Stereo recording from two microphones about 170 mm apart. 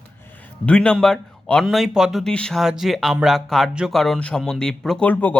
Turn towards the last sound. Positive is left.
turn(degrees=10)  # may be behind; listen again after turning